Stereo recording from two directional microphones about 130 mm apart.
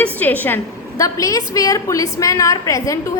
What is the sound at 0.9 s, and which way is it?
A woman's voice, 25° left (ahead or behind).